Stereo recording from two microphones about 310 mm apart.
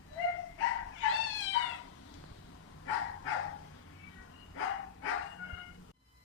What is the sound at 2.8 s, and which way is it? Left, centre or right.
Dog, left.